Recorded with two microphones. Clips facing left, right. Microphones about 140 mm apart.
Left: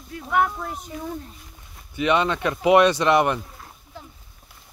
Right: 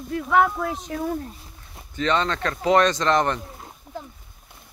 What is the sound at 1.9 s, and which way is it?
Speech, 15° left (ahead or behind).